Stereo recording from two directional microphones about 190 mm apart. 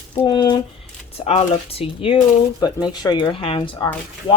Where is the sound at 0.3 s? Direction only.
25° left (ahead or behind).